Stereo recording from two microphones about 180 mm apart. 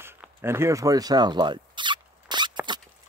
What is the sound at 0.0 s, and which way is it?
Zipper, 10° right (ahead or behind).